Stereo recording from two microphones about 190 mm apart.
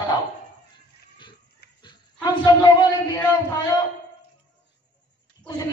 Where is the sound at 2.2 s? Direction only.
20° left (ahead or behind).